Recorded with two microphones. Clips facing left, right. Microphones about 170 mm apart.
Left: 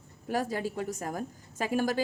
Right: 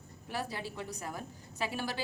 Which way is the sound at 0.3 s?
45° left (ahead or behind).